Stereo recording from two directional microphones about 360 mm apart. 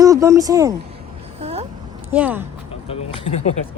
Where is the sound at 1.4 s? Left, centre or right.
Centre.